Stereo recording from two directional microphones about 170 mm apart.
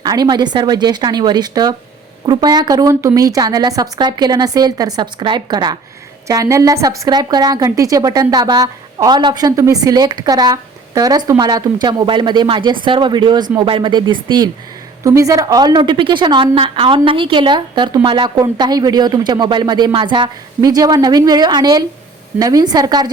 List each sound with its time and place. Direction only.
0.0 s a woman's voice: 25° right (ahead or behind)